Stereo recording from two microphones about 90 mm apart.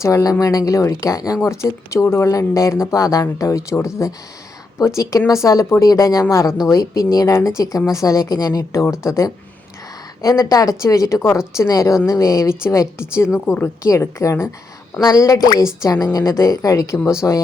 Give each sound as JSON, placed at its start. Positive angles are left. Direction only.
{"t": 0.0, "sound": "speech", "side_deg": 40}
{"t": 5.3, "sound": "a woman's voice", "side_deg": 35}
{"t": 9.0, "sound": "a woman's voice", "side_deg": 35}
{"t": 13.8, "sound": "a woman's voice", "side_deg": 35}